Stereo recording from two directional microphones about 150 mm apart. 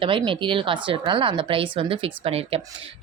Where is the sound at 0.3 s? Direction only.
35° right (ahead or behind).